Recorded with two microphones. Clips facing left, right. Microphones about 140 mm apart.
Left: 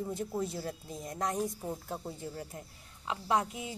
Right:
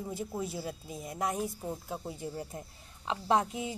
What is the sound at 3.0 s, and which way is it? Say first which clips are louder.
Speech: right 2 dB; 25° right (ahead or behind).